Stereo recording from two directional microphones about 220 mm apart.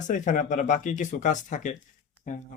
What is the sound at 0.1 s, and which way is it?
Speech, 35° left (ahead or behind).